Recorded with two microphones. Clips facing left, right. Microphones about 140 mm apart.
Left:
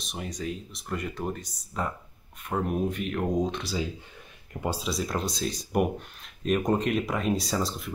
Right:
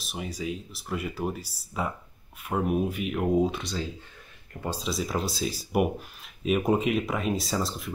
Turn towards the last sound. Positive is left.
turn(degrees=0)  # may be behind; listen again after turning